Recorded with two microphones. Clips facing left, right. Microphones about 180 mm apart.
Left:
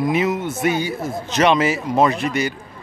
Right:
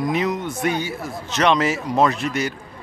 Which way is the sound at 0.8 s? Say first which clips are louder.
Left 4 dB; 15° left (ahead or behind).